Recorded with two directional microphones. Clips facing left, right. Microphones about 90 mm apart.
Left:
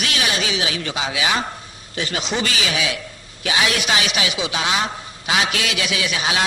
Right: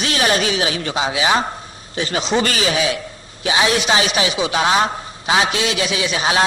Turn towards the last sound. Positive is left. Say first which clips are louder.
# right 4 dB
turn(degrees=-35)  # may be behind; listen again after turning